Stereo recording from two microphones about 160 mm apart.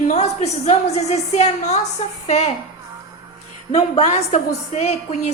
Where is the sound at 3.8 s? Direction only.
45° left (ahead or behind).